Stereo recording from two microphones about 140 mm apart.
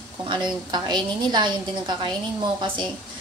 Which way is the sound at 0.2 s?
35° right (ahead or behind).